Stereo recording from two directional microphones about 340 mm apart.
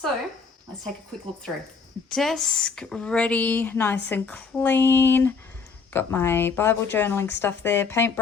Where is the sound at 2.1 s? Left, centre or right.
Centre.